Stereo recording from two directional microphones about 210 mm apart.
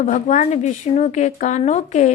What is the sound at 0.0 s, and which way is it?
A woman's voice, 35° left (ahead or behind).